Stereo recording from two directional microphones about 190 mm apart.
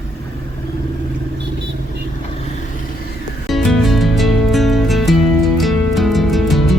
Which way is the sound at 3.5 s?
Centre (ahead or behind).